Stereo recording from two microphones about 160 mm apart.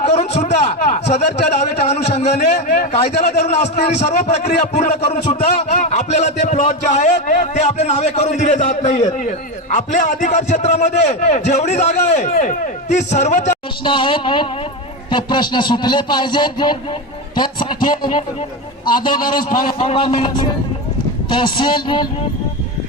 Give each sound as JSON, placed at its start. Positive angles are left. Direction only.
{"t": 0.1, "sound": "a sound", "side_deg": 40}
{"t": 3.4, "sound": "a man's voice", "side_deg": 40}
{"t": 13.8, "sound": "a man's voice", "side_deg": 30}
{"t": 19.0, "sound": "a man's voice", "side_deg": 60}
{"t": 19.6, "sound": "a man's voice", "side_deg": 35}